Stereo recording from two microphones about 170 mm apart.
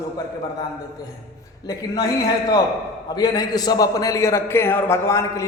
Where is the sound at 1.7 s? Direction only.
20° left (ahead or behind).